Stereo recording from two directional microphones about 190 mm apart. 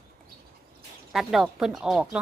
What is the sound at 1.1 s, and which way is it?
A woman's voice, centre (ahead or behind).